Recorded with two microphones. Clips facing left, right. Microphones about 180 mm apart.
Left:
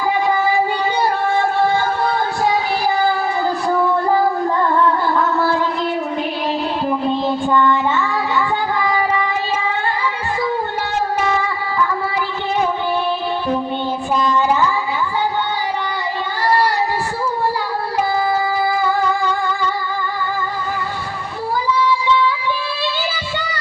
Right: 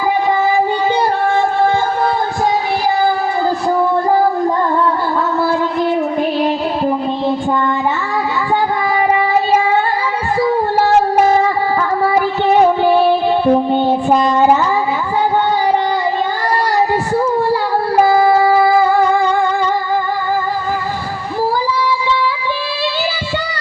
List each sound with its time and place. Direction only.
10.8 s child singing: 40° right (ahead or behind)
12.1 s music: 55° right (ahead or behind)
14.1 s child singing: 65° right (ahead or behind)
18.0 s a sound: 70° right (ahead or behind)